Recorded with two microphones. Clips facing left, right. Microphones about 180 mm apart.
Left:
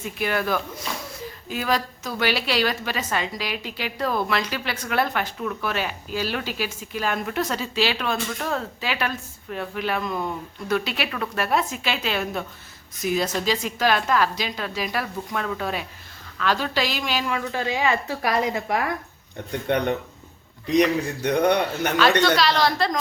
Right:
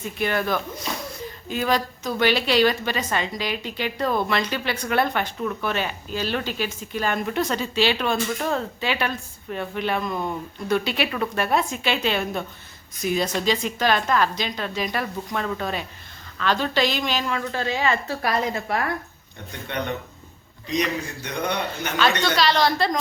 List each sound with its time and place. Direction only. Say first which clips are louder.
0.0 s a woman's voice: right 1 dB; 5° left (ahead or behind)
19.7 s speech: left 5 dB; 55° left (ahead or behind)
22.0 s a woman's voice: left 1 dB; centre (ahead or behind)